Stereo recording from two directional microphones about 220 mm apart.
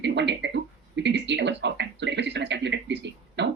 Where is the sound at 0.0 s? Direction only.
55° right (ahead or behind).